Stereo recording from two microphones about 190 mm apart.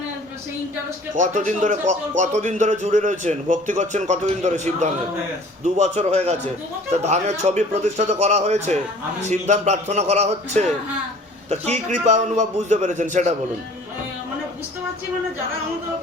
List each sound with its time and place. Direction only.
1.1 s a man's voice: 40° right (ahead or behind)